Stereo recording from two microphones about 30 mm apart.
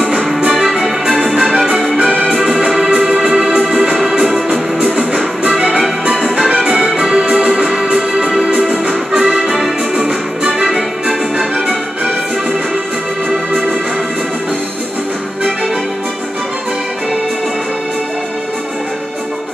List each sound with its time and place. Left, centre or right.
0.8 s music: centre
4.5 s music: right
7.0 s music: right
9.1 s music: right
10.6 s music: centre